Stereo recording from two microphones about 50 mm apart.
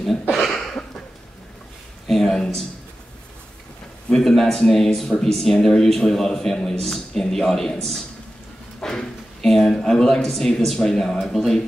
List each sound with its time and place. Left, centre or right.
0.4 s a sound: centre
2.0 s speech: centre
4.1 s a man's voice: centre